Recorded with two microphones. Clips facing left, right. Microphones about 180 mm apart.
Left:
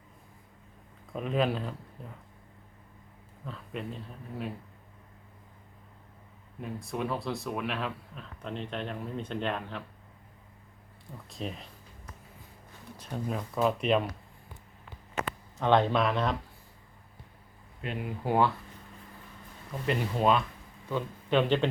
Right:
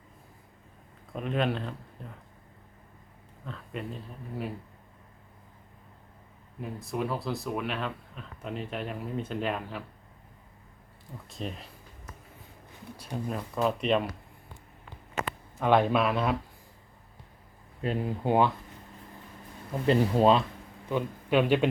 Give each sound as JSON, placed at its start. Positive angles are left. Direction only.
{"t": 1.1, "sound": "speech", "side_deg": 0}
{"t": 3.4, "sound": "speech", "side_deg": 0}
{"t": 6.6, "sound": "speech", "side_deg": 0}
{"t": 11.3, "sound": "speech", "side_deg": 0}
{"t": 13.0, "sound": "speech", "side_deg": -5}
{"t": 15.5, "sound": "speech", "side_deg": -10}
{"t": 17.8, "sound": "speech", "side_deg": -30}
{"t": 19.9, "sound": "speech", "side_deg": -35}
{"t": 20.9, "sound": "speech", "side_deg": -10}